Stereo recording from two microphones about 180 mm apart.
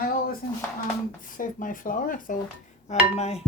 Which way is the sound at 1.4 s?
50° left (ahead or behind).